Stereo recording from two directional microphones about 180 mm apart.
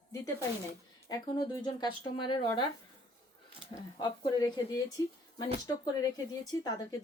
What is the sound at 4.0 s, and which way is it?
Speech, 25° left (ahead or behind).